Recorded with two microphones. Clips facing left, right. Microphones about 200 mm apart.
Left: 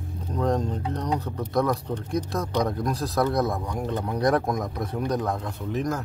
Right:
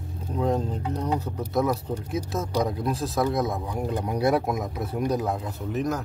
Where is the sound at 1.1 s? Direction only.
10° right (ahead or behind).